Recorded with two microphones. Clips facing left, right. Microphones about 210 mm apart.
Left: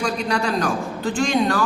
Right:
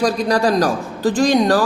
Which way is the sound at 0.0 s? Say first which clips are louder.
Right 6 dB; 35° right (ahead or behind).